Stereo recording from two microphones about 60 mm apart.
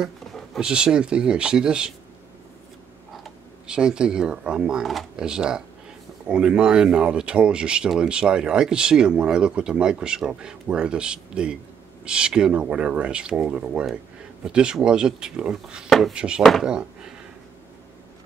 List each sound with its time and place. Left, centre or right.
0.6 s speech: centre
3.6 s speech: centre